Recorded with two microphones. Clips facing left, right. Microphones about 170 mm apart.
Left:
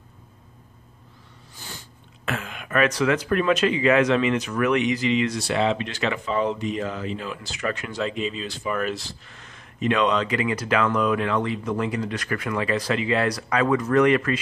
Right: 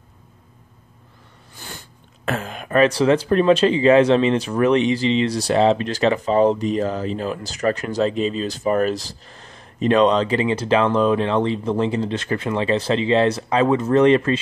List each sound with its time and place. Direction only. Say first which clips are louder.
2.2 s speech: right 5 dB; 40° right (ahead or behind)